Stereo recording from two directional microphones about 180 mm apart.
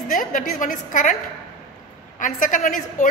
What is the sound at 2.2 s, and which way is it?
Speech, 45° left (ahead or behind).